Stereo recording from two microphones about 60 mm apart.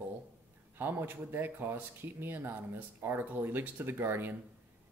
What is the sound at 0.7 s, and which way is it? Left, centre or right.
Speech, right.